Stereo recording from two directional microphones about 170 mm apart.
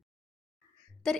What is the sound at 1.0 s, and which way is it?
Speech, centre (ahead or behind).